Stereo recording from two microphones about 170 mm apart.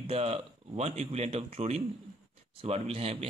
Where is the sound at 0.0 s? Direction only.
35° right (ahead or behind).